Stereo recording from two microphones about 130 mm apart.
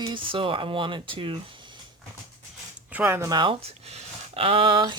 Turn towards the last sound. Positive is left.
turn(degrees=-40)  # may be behind; listen again after turning